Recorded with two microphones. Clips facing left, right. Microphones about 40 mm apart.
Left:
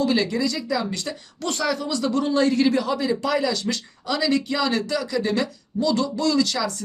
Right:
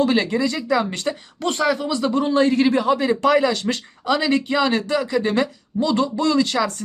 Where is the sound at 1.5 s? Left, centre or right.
Right.